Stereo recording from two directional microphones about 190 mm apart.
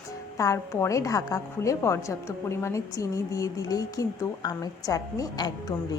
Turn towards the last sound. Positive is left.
turn(degrees=20)  # may be behind; listen again after turning